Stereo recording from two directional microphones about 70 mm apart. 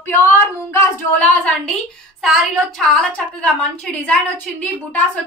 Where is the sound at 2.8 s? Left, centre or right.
Centre.